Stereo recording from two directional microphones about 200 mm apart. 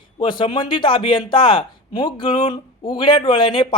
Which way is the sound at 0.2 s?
25° left (ahead or behind).